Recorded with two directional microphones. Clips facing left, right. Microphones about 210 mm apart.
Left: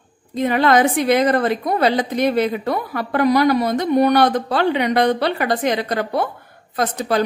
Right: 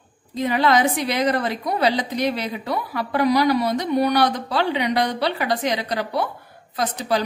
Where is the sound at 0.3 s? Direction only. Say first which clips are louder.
Left 3 dB; 55° left (ahead or behind).